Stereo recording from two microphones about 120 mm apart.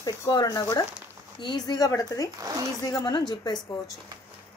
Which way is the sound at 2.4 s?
30° right (ahead or behind).